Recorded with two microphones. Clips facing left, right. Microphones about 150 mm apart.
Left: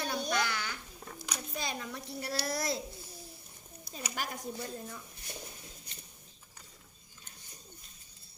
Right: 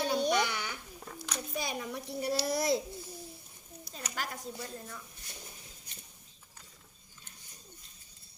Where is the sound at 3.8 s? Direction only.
15° left (ahead or behind).